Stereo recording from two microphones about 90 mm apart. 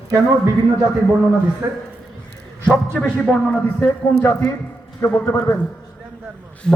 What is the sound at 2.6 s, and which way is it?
Speech, 15° left (ahead or behind).